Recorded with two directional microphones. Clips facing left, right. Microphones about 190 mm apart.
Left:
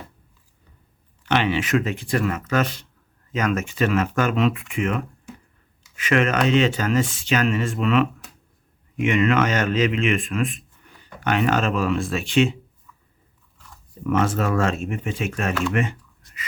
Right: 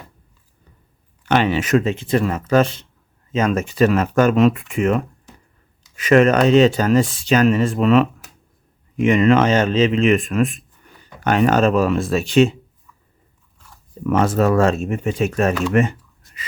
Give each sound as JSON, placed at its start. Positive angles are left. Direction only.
{"t": 1.3, "sound": "speech", "side_deg": -40}
{"t": 1.8, "sound": "speech", "side_deg": -25}
{"t": 14.1, "sound": "speech", "side_deg": -35}
{"t": 15.7, "sound": "typing", "side_deg": -40}